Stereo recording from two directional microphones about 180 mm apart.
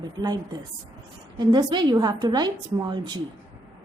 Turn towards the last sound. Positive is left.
turn(degrees=-25)  # may be behind; listen again after turning